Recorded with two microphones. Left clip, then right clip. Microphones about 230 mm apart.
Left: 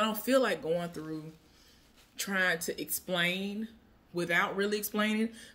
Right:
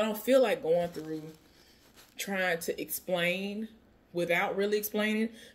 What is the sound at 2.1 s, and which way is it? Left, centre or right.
Speech, centre.